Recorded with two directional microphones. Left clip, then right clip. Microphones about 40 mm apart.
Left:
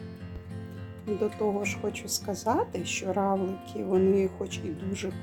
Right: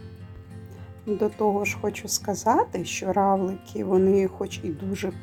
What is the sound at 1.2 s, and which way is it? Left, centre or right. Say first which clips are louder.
Speech: right 5 dB; right.